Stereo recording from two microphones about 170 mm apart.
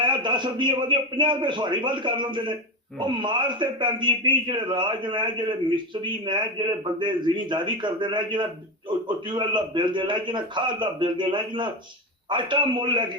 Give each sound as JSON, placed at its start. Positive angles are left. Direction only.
{"t": 0.0, "sound": "a man's voice", "side_deg": -25}